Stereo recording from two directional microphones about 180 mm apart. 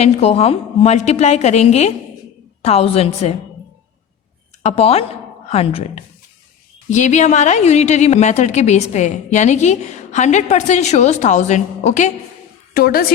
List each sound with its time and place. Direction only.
0.0 s a woman's voice: 35° left (ahead or behind)
4.6 s a woman's voice: 35° left (ahead or behind)
12.7 s a woman's voice: 55° left (ahead or behind)